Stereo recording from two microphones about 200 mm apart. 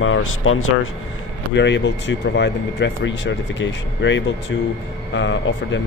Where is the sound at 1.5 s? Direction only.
60° left (ahead or behind).